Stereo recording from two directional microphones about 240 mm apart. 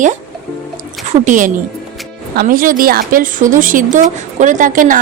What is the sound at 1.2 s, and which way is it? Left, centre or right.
Speech, right.